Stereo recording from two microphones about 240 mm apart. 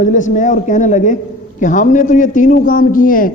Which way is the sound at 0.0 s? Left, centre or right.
Left.